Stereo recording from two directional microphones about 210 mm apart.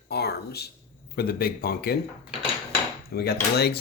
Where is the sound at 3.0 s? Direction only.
50° left (ahead or behind).